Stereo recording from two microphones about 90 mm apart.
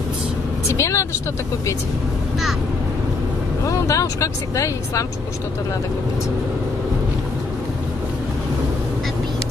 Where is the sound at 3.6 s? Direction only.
40° left (ahead or behind).